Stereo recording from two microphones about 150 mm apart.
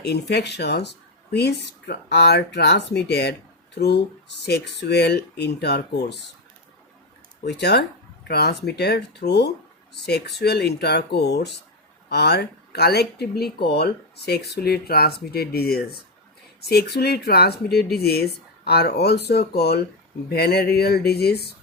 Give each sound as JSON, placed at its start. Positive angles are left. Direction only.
{"t": 0.0, "sound": "speech", "side_deg": 90}
{"t": 7.5, "sound": "speech", "side_deg": 90}